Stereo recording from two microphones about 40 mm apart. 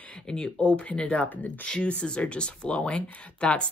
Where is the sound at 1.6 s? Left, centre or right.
Left.